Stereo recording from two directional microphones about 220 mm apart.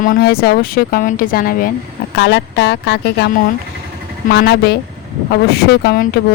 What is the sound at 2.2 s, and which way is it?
Speech, 50° left (ahead or behind).